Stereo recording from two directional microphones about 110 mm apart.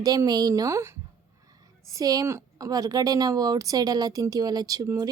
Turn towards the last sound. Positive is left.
turn(degrees=-35)  # may be behind; listen again after turning